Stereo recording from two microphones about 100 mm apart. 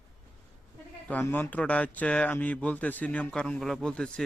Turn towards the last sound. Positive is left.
turn(degrees=10)  # may be behind; listen again after turning